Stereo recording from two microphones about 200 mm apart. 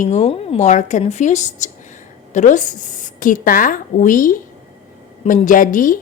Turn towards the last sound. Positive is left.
turn(degrees=40)  # may be behind; listen again after turning